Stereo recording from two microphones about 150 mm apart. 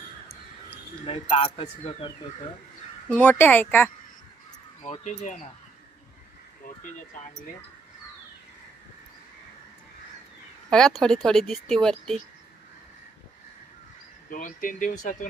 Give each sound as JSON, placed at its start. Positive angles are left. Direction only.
{"t": 1.0, "sound": "speech", "side_deg": 45}
{"t": 3.1, "sound": "speech", "side_deg": 10}
{"t": 4.9, "sound": "speech", "side_deg": 50}
{"t": 10.7, "sound": "speech", "side_deg": 5}
{"t": 14.3, "sound": "speech", "side_deg": 65}